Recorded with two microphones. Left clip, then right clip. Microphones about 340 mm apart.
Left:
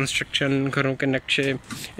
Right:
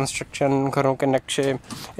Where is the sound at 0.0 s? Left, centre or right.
Centre.